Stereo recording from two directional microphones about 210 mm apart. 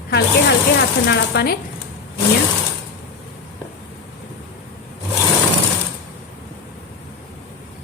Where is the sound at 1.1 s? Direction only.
50° left (ahead or behind).